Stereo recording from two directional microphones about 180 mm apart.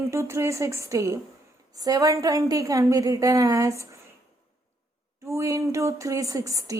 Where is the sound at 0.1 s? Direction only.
15° right (ahead or behind).